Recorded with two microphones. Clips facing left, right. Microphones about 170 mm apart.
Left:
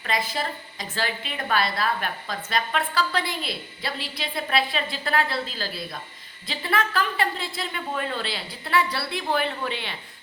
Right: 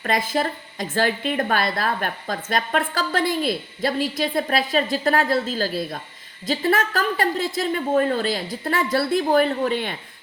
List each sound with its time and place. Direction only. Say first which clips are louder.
0.0 s a woman's voice: right 5 dB; 50° right (ahead or behind)